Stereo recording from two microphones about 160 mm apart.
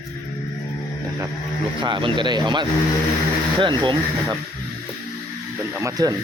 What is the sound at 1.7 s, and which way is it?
Speech, 30° right (ahead or behind).